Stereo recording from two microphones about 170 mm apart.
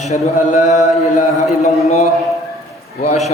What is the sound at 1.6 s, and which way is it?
Speech, 40° left (ahead or behind).